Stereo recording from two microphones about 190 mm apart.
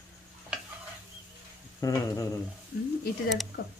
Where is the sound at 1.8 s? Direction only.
15° left (ahead or behind).